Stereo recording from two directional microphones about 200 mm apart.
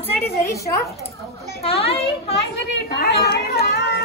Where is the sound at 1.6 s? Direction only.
30° left (ahead or behind).